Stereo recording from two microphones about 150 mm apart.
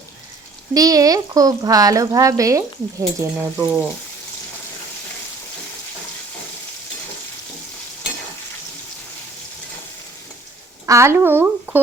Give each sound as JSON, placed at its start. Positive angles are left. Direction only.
{"t": 0.7, "sound": "speech", "side_deg": -25}
{"t": 10.8, "sound": "speech", "side_deg": -20}